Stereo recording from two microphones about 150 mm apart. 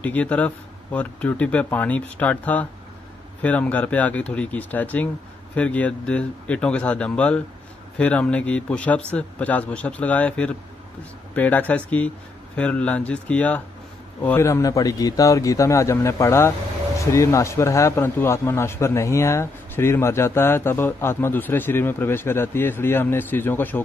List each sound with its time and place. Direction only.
0.0 s a man's voice: 10° left (ahead or behind)